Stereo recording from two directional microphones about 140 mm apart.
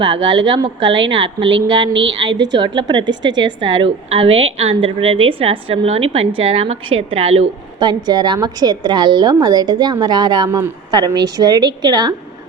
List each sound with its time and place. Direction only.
0.0 s speech: 35° right (ahead or behind)
7.8 s a woman's voice: 30° right (ahead or behind)